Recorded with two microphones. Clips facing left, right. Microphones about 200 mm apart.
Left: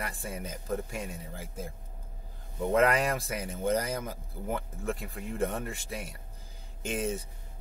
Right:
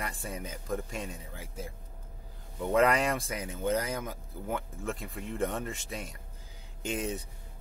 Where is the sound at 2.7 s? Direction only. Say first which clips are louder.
Even; centre (ahead or behind).